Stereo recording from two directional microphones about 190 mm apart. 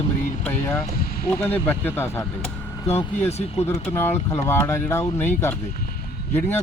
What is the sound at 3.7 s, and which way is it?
Speech, 10° left (ahead or behind).